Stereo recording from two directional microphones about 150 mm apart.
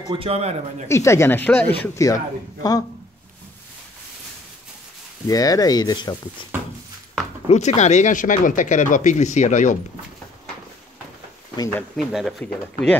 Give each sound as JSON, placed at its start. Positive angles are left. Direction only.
{"t": 0.1, "sound": "a man's voice", "side_deg": -40}
{"t": 0.8, "sound": "speech", "side_deg": 20}
{"t": 2.0, "sound": "a man's voice", "side_deg": 25}
{"t": 5.3, "sound": "a man's voice", "side_deg": 25}
{"t": 7.4, "sound": "speech", "side_deg": 50}
{"t": 11.7, "sound": "speech", "side_deg": 0}